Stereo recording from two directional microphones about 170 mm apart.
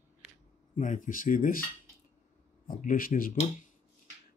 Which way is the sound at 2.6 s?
55° left (ahead or behind).